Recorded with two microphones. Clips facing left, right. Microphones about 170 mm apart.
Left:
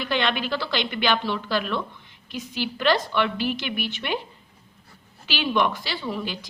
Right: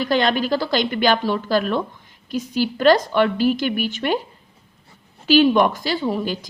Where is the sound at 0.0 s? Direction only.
40° right (ahead or behind).